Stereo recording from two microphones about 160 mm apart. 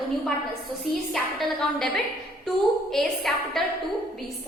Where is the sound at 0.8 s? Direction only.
Centre (ahead or behind).